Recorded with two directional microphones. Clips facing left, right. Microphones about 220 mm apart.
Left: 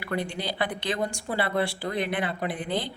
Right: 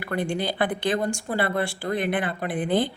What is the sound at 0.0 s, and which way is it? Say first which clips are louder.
A woman's voice: right 4 dB; 50° right (ahead or behind).